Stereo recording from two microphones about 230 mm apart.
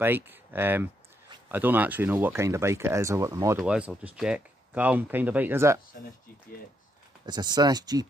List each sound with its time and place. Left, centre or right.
0.0 s speech: centre
7.2 s speech: centre